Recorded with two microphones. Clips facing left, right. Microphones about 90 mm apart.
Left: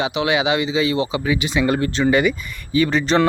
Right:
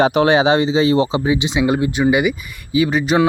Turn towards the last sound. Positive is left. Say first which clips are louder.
# right 1 dB
turn(degrees=-10)  # may be behind; listen again after turning